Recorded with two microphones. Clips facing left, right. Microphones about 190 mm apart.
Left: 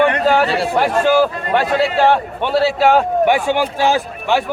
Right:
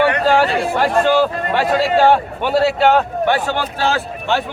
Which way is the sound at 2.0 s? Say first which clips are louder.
Right 1 dB; centre (ahead or behind).